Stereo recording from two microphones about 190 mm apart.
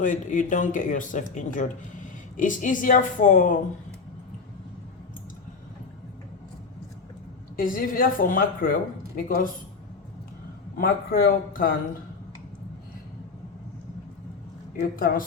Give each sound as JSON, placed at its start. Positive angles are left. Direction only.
{"t": 0.0, "sound": "speech", "side_deg": 40}
{"t": 7.5, "sound": "speech", "side_deg": 45}
{"t": 10.8, "sound": "speech", "side_deg": 45}
{"t": 14.8, "sound": "speech", "side_deg": 45}